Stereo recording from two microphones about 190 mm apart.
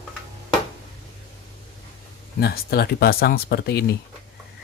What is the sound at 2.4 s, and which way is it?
Speech, 55° left (ahead or behind).